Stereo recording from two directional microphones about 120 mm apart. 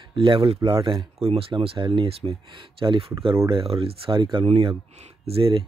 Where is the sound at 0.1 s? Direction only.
45° right (ahead or behind).